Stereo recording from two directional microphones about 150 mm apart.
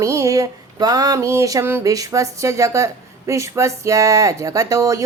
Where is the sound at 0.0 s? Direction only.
20° right (ahead or behind).